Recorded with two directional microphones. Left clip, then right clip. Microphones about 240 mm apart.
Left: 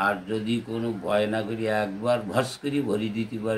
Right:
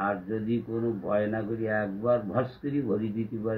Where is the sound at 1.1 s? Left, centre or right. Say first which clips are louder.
Left 5 dB; left.